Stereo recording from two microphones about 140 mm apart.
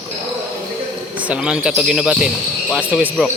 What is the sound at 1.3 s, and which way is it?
A man's voice, 5° right (ahead or behind).